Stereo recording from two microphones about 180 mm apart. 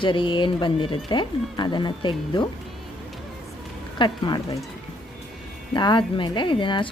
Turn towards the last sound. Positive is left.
turn(degrees=25)  # may be behind; listen again after turning